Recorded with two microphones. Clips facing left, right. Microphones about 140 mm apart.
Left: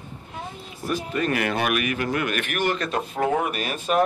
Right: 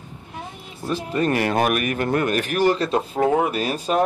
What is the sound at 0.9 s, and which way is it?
Speech, 30° right (ahead or behind).